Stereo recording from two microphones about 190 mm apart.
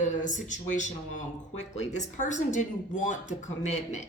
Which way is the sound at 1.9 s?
40° left (ahead or behind).